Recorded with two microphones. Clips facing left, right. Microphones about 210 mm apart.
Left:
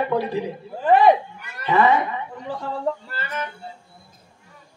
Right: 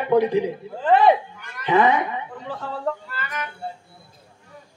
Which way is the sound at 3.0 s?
30° left (ahead or behind).